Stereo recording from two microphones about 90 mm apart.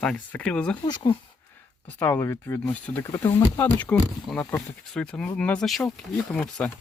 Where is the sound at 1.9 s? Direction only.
20° left (ahead or behind).